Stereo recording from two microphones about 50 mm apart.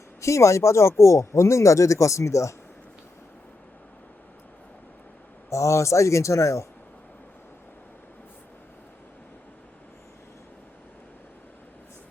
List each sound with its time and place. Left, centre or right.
0.2 s speech: left
5.5 s speech: left